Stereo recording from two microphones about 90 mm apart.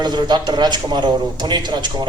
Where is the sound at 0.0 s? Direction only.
55° right (ahead or behind).